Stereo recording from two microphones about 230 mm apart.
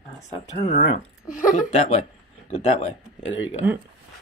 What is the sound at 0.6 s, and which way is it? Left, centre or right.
A woman's voice, left.